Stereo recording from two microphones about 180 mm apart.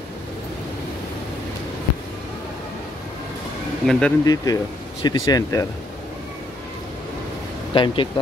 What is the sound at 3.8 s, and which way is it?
Speech, 5° left (ahead or behind).